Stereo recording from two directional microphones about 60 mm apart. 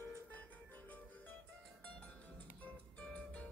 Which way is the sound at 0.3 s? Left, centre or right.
Left.